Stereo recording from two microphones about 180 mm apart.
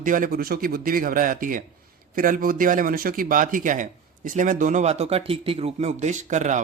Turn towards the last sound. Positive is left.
turn(degrees=-40)  # may be behind; listen again after turning